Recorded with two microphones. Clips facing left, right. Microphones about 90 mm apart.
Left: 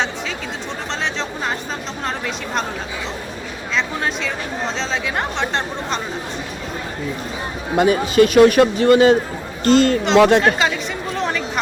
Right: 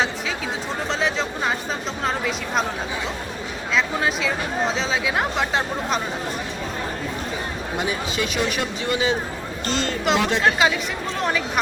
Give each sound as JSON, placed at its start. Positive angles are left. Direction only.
{"t": 2.0, "sound": "speech", "side_deg": 0}
{"t": 3.8, "sound": "speech", "side_deg": -5}
{"t": 7.8, "sound": "a man's voice", "side_deg": 55}
{"t": 10.2, "sound": "speech", "side_deg": 60}
{"t": 10.4, "sound": "speech", "side_deg": 0}